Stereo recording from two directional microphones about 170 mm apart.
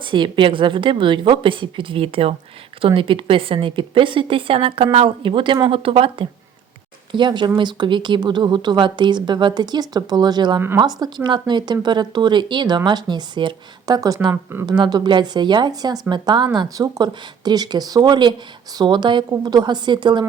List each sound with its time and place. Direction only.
0.0 s a woman's voice: 30° right (ahead or behind)
14.8 s speech: 25° right (ahead or behind)